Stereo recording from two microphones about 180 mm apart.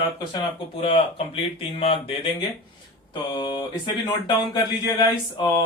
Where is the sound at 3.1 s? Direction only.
25° left (ahead or behind).